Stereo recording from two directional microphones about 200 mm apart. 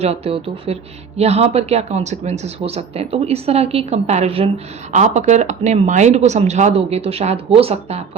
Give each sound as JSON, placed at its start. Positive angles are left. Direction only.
{"t": 0.0, "sound": "speech", "side_deg": -30}